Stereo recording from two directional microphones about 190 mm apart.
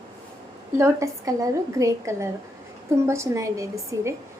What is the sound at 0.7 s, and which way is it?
A woman's voice, 15° right (ahead or behind).